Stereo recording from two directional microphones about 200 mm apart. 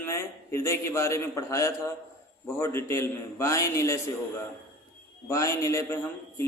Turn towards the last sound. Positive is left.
turn(degrees=15)  # may be behind; listen again after turning